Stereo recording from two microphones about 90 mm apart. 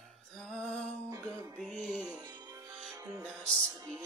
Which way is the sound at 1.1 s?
35° right (ahead or behind).